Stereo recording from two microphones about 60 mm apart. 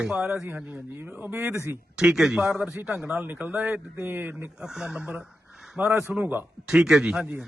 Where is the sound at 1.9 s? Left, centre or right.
Centre.